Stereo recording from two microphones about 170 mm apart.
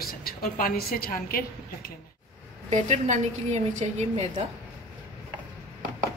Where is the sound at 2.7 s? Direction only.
45° right (ahead or behind).